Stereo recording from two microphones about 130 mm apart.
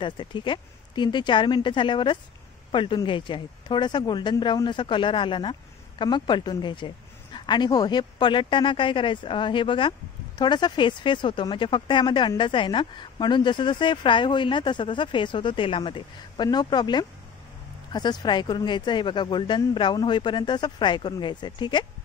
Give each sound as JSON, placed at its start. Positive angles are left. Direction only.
{"t": 0.0, "sound": "speech", "side_deg": 40}